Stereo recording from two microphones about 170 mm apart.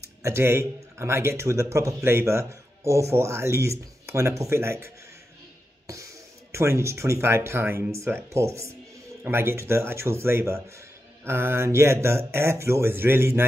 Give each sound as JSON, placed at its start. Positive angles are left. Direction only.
{"t": 0.0, "sound": "speech", "side_deg": -15}
{"t": 6.5, "sound": "speech", "side_deg": -15}